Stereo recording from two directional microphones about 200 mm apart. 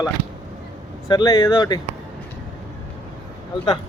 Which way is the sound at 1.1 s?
20° left (ahead or behind).